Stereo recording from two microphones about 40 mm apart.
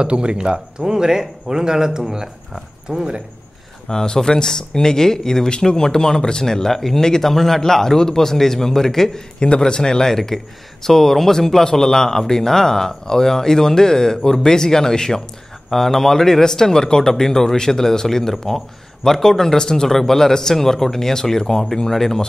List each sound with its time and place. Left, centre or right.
0.0 s a man's voice: right
3.9 s speech: centre